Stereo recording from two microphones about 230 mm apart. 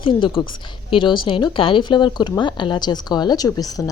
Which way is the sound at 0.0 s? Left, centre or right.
Left.